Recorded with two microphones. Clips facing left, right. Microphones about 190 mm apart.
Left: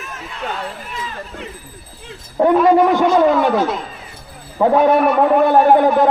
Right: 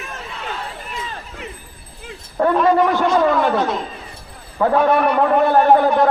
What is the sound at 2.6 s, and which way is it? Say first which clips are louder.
Speech: left 3 dB; 15° left (ahead or behind).